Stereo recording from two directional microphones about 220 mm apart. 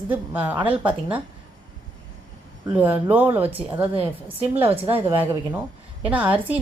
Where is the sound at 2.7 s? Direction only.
5° right (ahead or behind).